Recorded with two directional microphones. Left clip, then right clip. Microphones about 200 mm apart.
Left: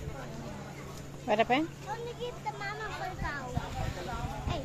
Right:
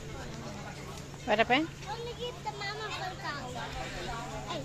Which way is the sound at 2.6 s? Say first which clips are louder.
Right 2 dB; 10° right (ahead or behind).